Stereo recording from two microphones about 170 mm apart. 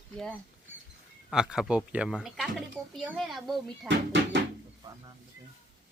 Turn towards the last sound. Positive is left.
turn(degrees=-90)